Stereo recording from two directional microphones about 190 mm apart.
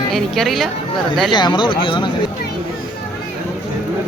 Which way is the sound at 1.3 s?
25° left (ahead or behind).